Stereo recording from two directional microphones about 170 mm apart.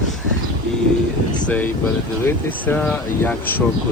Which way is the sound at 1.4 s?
10° left (ahead or behind).